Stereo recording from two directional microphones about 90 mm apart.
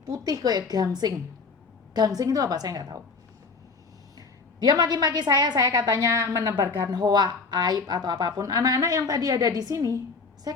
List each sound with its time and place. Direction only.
0.0 s a woman's voice: 45° right (ahead or behind)
4.6 s a woman's voice: 50° right (ahead or behind)
6.9 s a woman's voice: 55° right (ahead or behind)